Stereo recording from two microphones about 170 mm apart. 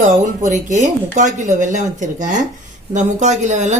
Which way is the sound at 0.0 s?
45° right (ahead or behind).